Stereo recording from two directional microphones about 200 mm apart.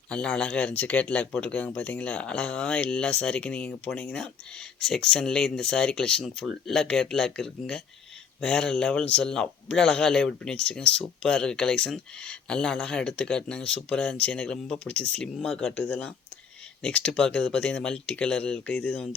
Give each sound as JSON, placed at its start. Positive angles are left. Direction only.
{"t": 0.1, "sound": "speech", "side_deg": 5}